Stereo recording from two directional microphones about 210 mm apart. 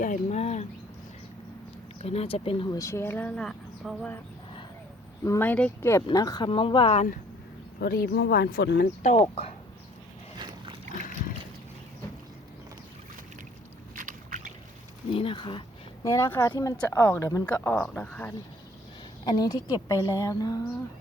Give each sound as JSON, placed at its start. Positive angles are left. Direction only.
{"t": 0.0, "sound": "speech", "side_deg": 35}
{"t": 2.0, "sound": "speech", "side_deg": 30}
{"t": 5.2, "sound": "speech", "side_deg": 10}
{"t": 7.8, "sound": "speech", "side_deg": 50}
{"t": 9.0, "sound": "speech", "side_deg": 30}
{"t": 10.3, "sound": "boat", "side_deg": -20}
{"t": 13.9, "sound": "boat", "side_deg": -40}
{"t": 15.1, "sound": "speech", "side_deg": 25}
{"t": 19.2, "sound": "speech", "side_deg": 20}